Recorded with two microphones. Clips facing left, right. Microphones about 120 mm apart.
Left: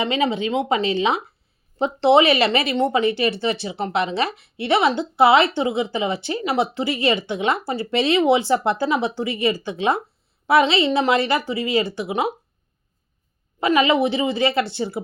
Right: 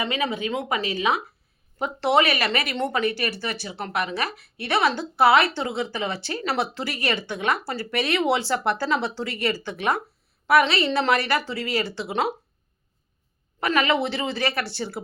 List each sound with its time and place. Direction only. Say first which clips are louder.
0.0 s speech: left 5 dB; 25° left (ahead or behind)
13.6 s speech: left 5 dB; 20° left (ahead or behind)